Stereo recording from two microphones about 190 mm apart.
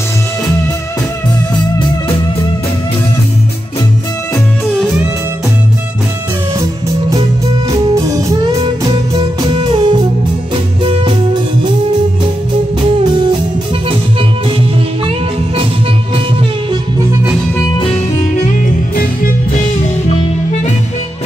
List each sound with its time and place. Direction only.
7.9 s music: 15° right (ahead or behind)
18.9 s music: 50° left (ahead or behind)